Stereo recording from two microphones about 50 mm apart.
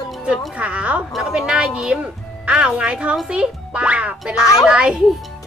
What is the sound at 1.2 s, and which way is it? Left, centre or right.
A child's voice, centre.